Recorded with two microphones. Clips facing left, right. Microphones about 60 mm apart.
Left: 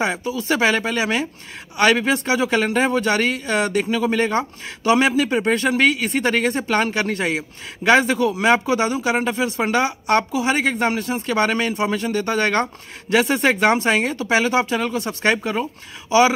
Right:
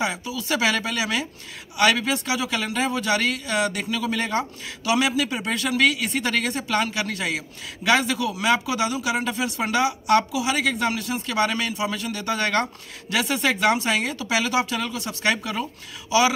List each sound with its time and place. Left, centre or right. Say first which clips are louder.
0.0 s a man's voice: left 4 dB; left